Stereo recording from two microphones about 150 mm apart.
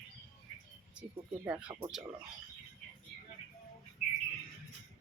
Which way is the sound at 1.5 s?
10° right (ahead or behind).